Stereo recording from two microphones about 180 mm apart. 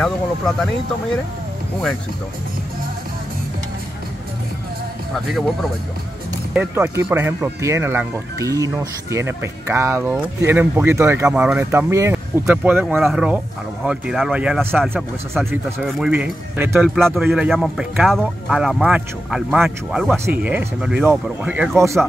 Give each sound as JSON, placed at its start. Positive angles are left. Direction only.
{"t": 5.1, "sound": "speech", "side_deg": 0}
{"t": 16.8, "sound": "speech", "side_deg": 0}